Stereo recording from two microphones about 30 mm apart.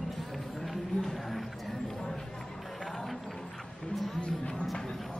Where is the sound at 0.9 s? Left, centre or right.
Left.